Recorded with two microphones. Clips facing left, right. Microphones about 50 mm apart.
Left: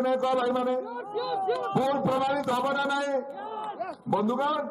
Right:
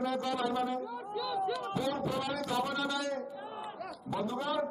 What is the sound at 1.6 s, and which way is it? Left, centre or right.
A man's voice, left.